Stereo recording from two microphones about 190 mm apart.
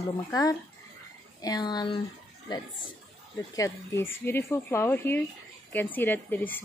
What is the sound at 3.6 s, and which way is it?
Speech, 15° left (ahead or behind).